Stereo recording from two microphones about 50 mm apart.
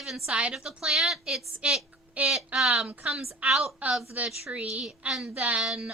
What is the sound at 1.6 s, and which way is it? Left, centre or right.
Speech, right.